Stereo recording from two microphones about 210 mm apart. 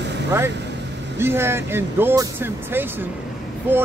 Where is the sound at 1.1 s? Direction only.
10° right (ahead or behind).